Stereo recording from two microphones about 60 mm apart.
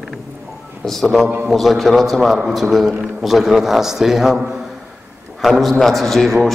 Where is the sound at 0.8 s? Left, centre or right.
Centre.